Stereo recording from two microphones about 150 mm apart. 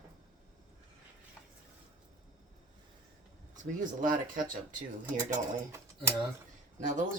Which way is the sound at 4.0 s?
65° right (ahead or behind).